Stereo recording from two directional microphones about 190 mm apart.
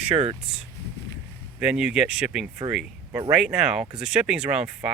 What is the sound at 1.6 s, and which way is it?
Speech, 5° right (ahead or behind).